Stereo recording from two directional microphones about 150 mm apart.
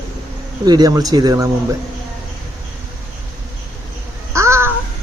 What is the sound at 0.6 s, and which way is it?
Speech, 25° right (ahead or behind).